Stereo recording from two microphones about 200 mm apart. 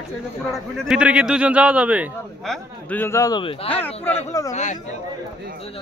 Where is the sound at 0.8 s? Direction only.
5° right (ahead or behind).